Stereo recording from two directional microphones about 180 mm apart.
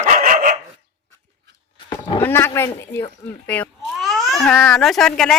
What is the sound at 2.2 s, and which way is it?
Speech, 10° left (ahead or behind).